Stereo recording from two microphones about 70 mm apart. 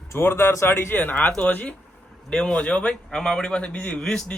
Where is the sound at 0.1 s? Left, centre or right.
Left.